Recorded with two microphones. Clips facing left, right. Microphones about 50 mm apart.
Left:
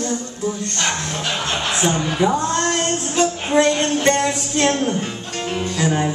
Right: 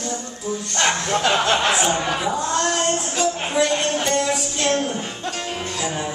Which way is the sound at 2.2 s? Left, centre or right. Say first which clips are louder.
Left 7 dB; left.